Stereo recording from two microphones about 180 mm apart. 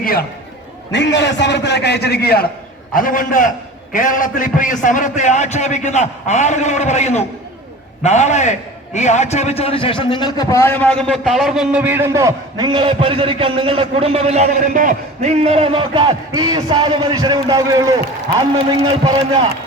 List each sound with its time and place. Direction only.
0.9 s a man's voice: 75° left (ahead or behind); by 2.5 s 60° left (ahead or behind)
2.9 s a man's voice: 50° left (ahead or behind); by 14.5 s 35° right (ahead or behind)
14.7 s a man's voice: 45° right (ahead or behind); by 17.9 s 20° right (ahead or behind)
19.0 s a man's voice: 30° right (ahead or behind)